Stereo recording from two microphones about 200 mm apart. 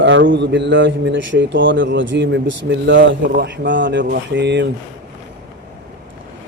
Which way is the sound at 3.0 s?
65° right (ahead or behind).